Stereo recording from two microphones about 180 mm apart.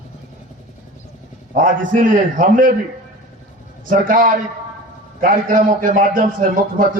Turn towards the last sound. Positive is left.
turn(degrees=-50)  # may be behind; listen again after turning